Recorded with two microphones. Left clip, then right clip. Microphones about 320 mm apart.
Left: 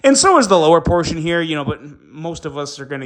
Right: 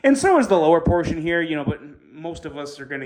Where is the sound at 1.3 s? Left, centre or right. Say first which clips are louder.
Left 4 dB; right.